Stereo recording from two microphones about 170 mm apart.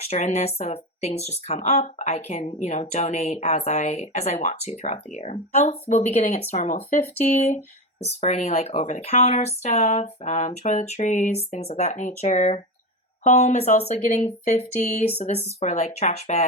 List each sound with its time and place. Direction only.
0.0 s speech: 40° left (ahead or behind)